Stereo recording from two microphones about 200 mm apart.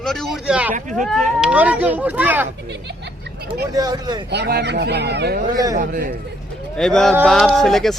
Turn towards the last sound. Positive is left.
turn(degrees=0)  # may be behind; listen again after turning